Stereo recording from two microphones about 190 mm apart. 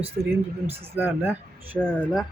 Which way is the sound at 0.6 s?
30° right (ahead or behind).